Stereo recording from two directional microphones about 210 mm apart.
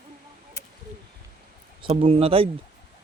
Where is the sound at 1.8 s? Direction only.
25° right (ahead or behind).